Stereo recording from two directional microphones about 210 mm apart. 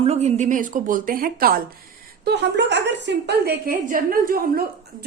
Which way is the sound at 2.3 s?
55° right (ahead or behind).